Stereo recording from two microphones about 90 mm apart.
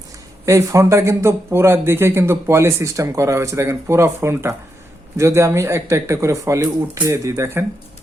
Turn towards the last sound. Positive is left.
turn(degrees=-35)  # may be behind; listen again after turning